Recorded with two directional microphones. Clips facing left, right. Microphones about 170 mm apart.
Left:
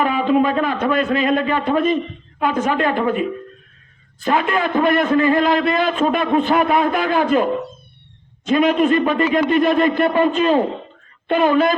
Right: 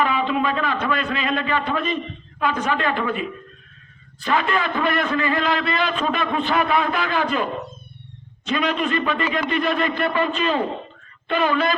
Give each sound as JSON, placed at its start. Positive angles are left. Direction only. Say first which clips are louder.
{"t": 0.0, "sound": "a man's voice", "louder": "left 5 dB", "side_deg": 45}
{"t": 4.2, "sound": "a man's voice", "louder": "left 3 dB", "side_deg": 50}
{"t": 8.4, "sound": "a man's voice", "louder": "left 8 dB", "side_deg": 50}